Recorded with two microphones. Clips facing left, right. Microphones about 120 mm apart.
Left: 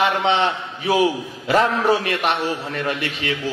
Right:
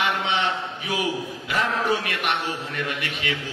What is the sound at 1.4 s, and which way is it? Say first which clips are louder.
A man's voice: left 8 dB; 35° left (ahead or behind).